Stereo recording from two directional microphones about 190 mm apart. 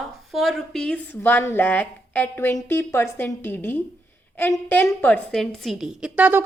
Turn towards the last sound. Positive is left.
turn(degrees=-10)  # may be behind; listen again after turning